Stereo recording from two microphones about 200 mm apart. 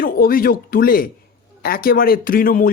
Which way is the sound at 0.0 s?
45° left (ahead or behind).